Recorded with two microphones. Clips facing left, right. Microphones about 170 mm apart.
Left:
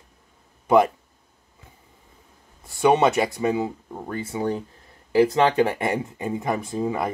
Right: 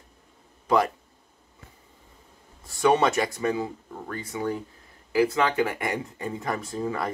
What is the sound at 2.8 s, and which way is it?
Speech, 20° left (ahead or behind).